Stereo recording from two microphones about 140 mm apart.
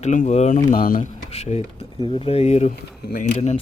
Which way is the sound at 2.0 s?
40° left (ahead or behind).